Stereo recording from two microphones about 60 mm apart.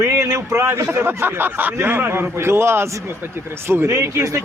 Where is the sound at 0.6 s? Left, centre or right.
Right.